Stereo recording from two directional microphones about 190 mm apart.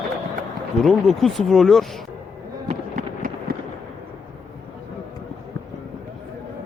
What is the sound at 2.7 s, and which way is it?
Fireworks, 45° right (ahead or behind).